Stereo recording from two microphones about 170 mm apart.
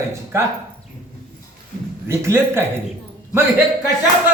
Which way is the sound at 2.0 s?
15° right (ahead or behind).